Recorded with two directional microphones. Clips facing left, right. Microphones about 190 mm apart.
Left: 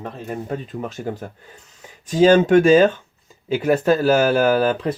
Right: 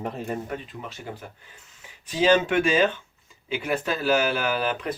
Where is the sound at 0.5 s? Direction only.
45° left (ahead or behind).